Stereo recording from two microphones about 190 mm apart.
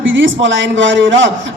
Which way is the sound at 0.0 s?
85° right.